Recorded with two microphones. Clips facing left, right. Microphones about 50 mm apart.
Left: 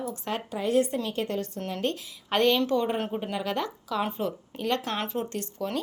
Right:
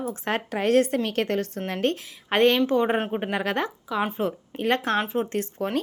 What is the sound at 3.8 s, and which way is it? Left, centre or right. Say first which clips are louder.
Speech: right 2 dB; right.